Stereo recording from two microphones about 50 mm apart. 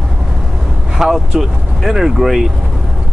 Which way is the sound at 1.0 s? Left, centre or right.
Centre.